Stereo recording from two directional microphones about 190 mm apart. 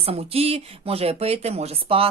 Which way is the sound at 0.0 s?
30° right (ahead or behind).